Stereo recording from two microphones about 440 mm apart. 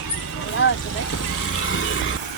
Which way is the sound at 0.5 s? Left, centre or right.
Left.